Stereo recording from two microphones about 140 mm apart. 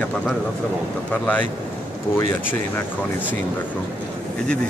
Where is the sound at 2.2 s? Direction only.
15° left (ahead or behind).